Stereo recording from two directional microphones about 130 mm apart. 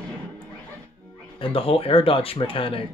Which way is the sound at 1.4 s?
45° left (ahead or behind).